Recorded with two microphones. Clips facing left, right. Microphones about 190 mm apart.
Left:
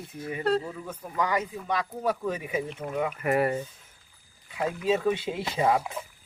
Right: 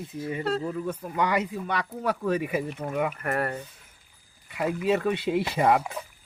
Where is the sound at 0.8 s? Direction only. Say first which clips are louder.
Right 3 dB; 65° right (ahead or behind).